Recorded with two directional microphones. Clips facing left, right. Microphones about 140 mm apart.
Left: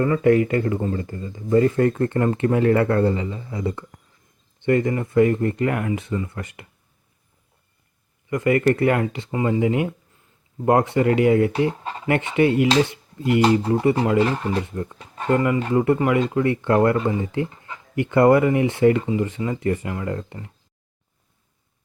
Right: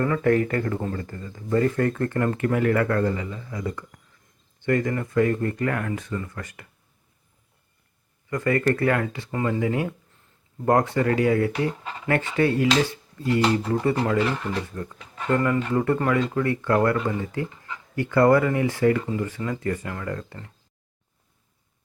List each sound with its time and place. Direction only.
0.0 s speech: 5° left (ahead or behind)
8.3 s speech: 20° left (ahead or behind)
12.0 s speech: 20° left (ahead or behind)
15.4 s speech: 15° left (ahead or behind)